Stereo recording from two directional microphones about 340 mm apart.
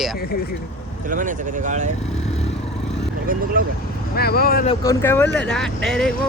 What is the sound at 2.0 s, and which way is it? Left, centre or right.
Vehicle, centre.